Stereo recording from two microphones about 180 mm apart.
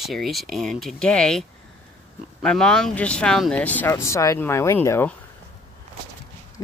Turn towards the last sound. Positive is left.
turn(degrees=20)  # may be behind; listen again after turning